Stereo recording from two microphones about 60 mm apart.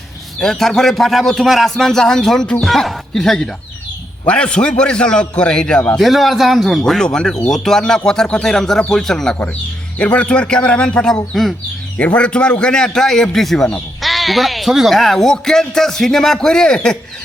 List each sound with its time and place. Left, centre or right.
0.3 s a man's voice: centre
6.0 s a man's voice: centre
10.0 s speech: left
11.9 s speech: left